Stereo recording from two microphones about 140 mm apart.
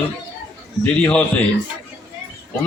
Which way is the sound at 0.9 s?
10° left (ahead or behind).